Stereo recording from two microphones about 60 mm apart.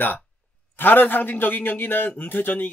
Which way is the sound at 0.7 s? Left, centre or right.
Left.